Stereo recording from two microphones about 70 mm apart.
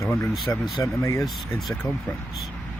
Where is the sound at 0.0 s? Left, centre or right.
Left.